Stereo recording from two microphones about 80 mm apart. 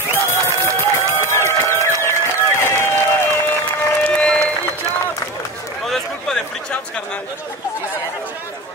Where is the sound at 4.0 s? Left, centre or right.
Centre.